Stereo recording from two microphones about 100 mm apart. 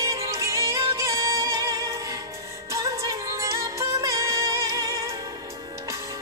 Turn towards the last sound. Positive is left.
turn(degrees=-35)  # may be behind; listen again after turning